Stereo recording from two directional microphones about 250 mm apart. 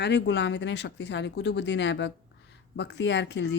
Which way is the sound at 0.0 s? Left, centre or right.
Left.